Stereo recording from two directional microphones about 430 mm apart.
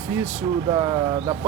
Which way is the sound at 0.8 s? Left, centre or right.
Centre.